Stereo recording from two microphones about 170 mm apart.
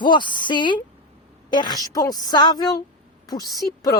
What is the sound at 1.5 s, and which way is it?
Speech, 25° left (ahead or behind).